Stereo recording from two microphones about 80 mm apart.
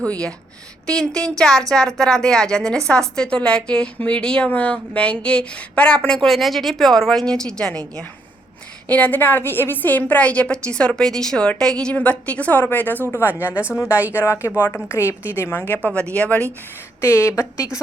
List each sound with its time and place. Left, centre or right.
0.0 s a woman's voice: centre
13.2 s a woman's voice: centre
13.7 s a woman's voice: left
14.6 s a woman's voice: left
15.9 s a woman's voice: centre
17.0 s a woman's voice: left